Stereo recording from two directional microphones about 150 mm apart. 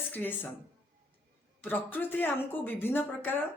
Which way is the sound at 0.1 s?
10° left (ahead or behind).